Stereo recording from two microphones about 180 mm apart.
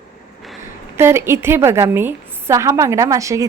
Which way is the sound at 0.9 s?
15° right (ahead or behind).